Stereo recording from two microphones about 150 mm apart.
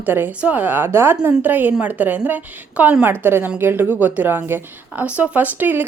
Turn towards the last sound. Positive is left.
turn(degrees=-10)  # may be behind; listen again after turning